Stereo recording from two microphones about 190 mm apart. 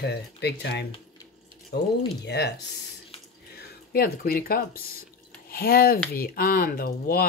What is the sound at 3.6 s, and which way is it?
Speech, 50° left (ahead or behind).